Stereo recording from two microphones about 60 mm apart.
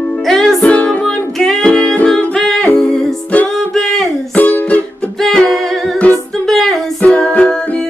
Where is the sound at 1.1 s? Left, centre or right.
Centre.